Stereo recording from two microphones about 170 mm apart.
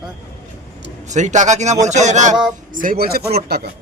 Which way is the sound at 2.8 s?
65° right (ahead or behind).